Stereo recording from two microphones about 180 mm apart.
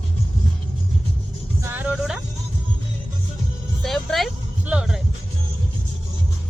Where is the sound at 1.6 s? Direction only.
10° right (ahead or behind).